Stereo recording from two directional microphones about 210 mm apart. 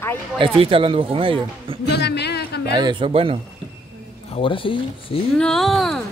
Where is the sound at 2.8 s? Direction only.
20° right (ahead or behind).